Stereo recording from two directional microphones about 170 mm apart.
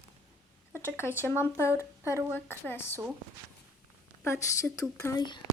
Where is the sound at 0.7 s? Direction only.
15° left (ahead or behind).